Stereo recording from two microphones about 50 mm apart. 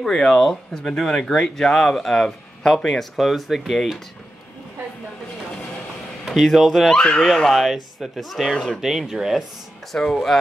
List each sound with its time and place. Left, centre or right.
0.0 s speech: centre
6.2 s speech: centre
7.0 s speech: centre
7.2 s speech: centre
9.9 s speech: centre